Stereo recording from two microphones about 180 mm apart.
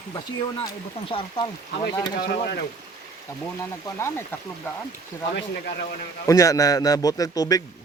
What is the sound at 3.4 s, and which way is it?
A man's voice, 15° left (ahead or behind).